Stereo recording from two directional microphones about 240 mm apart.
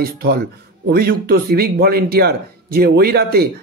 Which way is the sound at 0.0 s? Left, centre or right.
Right.